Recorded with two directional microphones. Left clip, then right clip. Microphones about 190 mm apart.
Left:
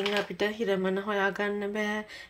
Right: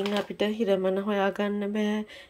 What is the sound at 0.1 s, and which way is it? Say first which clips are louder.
A woman's voice: right 1 dB; 20° right (ahead or behind).